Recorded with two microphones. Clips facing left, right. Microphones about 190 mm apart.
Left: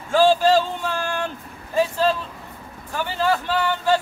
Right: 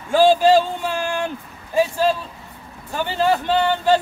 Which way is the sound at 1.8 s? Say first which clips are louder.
Right 2 dB; 10° right (ahead or behind).